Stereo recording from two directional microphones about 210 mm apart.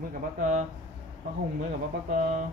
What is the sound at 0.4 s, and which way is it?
Speech, 40° right (ahead or behind).